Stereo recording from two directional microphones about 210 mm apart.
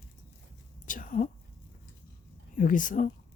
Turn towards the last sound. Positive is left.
turn(degrees=40)  # may be behind; listen again after turning